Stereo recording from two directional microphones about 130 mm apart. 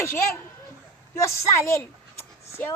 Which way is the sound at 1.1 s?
20° left (ahead or behind).